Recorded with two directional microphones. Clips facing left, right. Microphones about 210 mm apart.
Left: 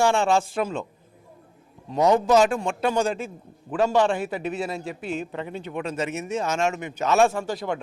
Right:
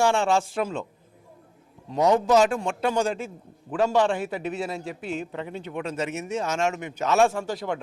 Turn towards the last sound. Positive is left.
turn(degrees=15)  # may be behind; listen again after turning